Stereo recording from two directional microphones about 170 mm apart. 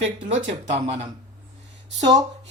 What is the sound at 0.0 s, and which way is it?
Speech, 45° right (ahead or behind).